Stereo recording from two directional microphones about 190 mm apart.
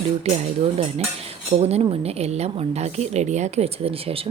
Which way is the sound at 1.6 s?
30° right (ahead or behind).